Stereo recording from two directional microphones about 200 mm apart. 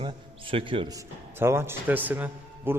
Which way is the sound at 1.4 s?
10° right (ahead or behind).